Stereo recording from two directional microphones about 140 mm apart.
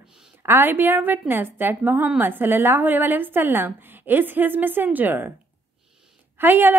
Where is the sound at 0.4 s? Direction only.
15° right (ahead or behind).